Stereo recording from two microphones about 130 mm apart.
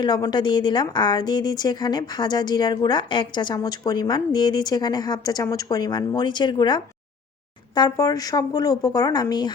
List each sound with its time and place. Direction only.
0.0 s a woman's voice: 35° left (ahead or behind)